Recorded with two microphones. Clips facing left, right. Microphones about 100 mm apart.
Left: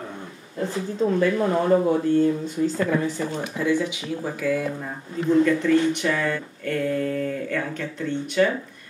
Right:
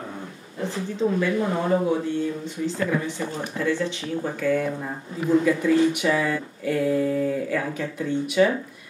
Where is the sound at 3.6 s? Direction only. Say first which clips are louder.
Left 2 dB; 15° left (ahead or behind).